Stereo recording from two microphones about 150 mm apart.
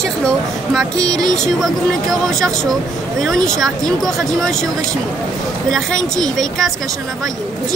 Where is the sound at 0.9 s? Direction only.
25° right (ahead or behind).